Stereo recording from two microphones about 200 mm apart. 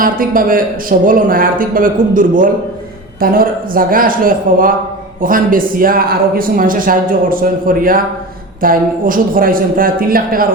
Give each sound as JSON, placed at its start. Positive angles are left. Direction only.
{"t": 0.0, "sound": "speech", "side_deg": -45}